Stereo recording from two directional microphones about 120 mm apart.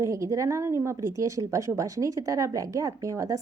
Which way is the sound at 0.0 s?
25° right (ahead or behind).